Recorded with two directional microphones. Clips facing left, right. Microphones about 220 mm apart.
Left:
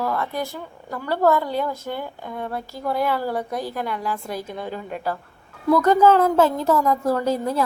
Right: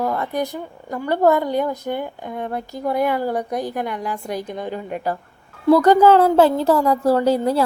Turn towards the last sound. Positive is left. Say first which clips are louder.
# right 5 dB
turn(degrees=-30)  # may be behind; listen again after turning